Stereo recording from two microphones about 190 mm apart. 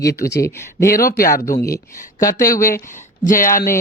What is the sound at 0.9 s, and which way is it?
Speech, 50° left (ahead or behind).